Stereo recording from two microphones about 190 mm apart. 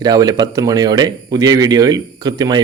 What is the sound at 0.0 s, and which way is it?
A man's voice, 20° right (ahead or behind).